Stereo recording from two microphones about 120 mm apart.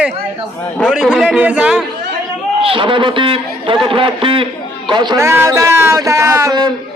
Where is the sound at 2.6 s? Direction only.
50° right (ahead or behind).